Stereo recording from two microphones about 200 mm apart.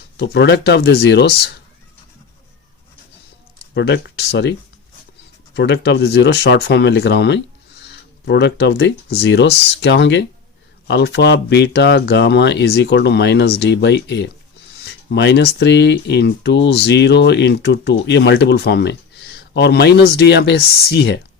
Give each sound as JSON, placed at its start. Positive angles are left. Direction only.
{"t": 0.2, "sound": "speech", "side_deg": 60}
{"t": 3.8, "sound": "speech", "side_deg": 55}
{"t": 5.5, "sound": "speech", "side_deg": 60}